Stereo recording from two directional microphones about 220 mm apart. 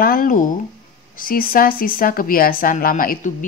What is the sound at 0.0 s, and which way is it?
Speech, 40° left (ahead or behind).